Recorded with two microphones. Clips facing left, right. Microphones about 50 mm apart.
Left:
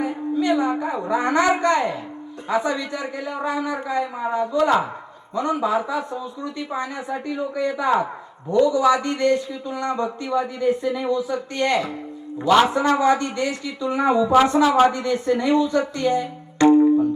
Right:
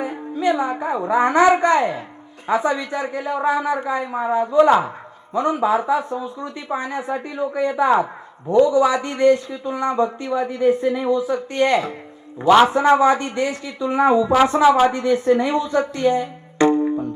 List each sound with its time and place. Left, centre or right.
0.0 s a child's voice: right
16.0 s music: right